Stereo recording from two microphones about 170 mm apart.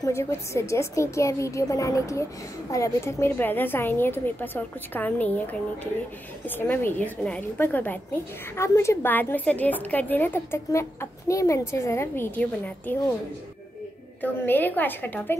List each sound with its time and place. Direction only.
0.0 s a woman's voice: 15° left (ahead or behind)
14.2 s a woman's voice: 10° left (ahead or behind)